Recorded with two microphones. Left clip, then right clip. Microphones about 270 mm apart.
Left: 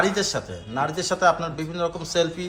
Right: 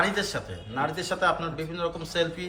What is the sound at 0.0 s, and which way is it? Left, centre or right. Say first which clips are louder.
A man's voice: left 3 dB; centre.